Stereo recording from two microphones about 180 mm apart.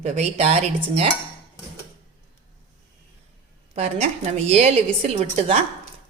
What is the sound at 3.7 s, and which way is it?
A woman's voice, 40° right (ahead or behind).